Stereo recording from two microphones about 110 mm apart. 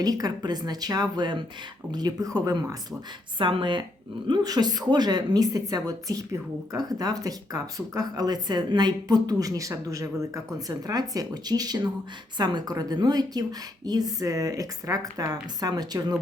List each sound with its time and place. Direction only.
0.0 s a woman's voice: 35° right (ahead or behind)
3.3 s a woman's voice: 50° right (ahead or behind)
4.3 s a woman's voice: 35° right (ahead or behind)